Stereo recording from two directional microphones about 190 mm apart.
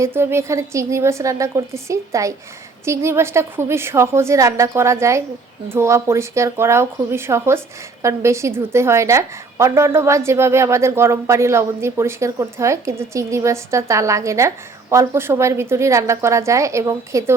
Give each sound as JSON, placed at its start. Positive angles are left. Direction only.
{"t": 0.0, "sound": "a woman's voice", "side_deg": -10}